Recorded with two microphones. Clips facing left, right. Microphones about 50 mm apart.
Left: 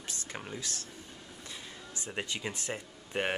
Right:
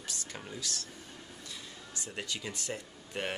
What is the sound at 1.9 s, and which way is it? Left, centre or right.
Speech, left.